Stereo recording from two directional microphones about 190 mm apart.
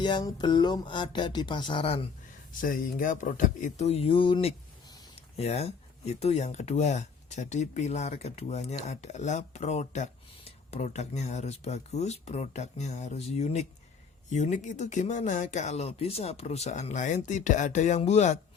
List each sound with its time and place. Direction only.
0.0 s speech: 20° left (ahead or behind)
2.6 s speech: 45° left (ahead or behind)